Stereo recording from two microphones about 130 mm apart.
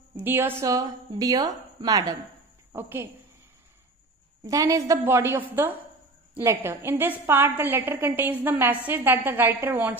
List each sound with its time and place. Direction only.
0.1 s a woman's voice: 15° right (ahead or behind)
2.7 s a woman's voice: 15° right (ahead or behind)
4.5 s a woman's voice: 25° right (ahead or behind)